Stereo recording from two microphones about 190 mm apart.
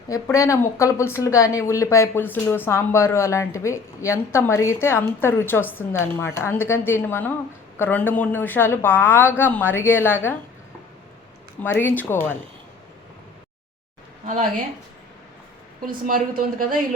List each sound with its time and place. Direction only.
0.1 s speech: 15° left (ahead or behind)
11.6 s speech: 10° left (ahead or behind)
15.9 s speech: 45° right (ahead or behind)